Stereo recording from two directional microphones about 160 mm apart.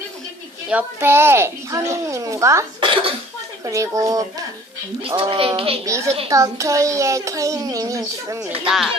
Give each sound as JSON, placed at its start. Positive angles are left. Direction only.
{"t": 0.7, "sound": "a child's voice", "side_deg": -10}
{"t": 2.8, "sound": "cough", "side_deg": -30}
{"t": 3.6, "sound": "a child's voice", "side_deg": -20}
{"t": 5.0, "sound": "speech", "side_deg": -35}
{"t": 5.8, "sound": "a child's voice", "side_deg": -20}
{"t": 8.6, "sound": "speech", "side_deg": 0}